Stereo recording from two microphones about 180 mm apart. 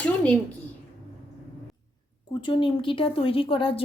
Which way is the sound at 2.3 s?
25° left (ahead or behind).